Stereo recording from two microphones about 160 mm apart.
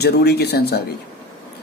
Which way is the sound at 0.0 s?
90° left.